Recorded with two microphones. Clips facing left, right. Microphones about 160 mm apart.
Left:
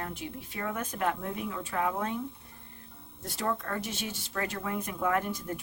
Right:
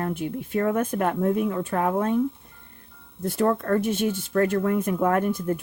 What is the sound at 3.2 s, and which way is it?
A woman's voice, 55° right (ahead or behind).